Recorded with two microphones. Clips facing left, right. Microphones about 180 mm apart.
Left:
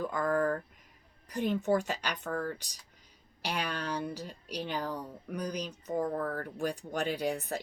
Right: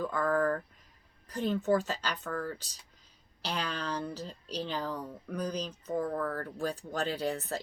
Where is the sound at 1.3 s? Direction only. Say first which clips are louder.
Even; 15° left (ahead or behind).